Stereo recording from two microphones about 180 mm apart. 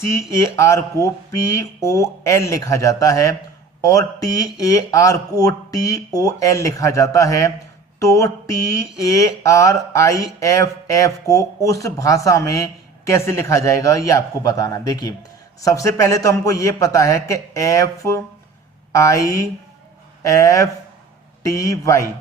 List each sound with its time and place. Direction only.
0.1 s speech: 15° left (ahead or behind)